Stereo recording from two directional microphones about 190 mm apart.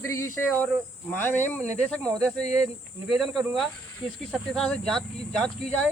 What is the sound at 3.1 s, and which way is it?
Speech, centre (ahead or behind).